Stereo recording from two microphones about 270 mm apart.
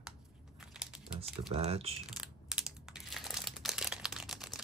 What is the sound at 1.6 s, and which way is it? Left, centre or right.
Speech, right.